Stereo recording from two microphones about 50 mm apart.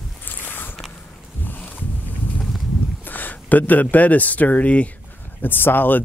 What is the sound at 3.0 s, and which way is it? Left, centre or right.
Speech, left.